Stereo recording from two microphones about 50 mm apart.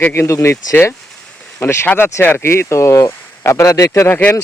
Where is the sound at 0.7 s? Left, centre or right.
Left.